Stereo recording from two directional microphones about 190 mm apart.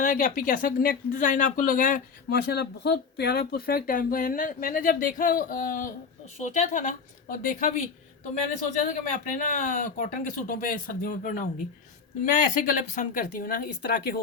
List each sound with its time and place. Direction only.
0.0 s speech: 45° left (ahead or behind)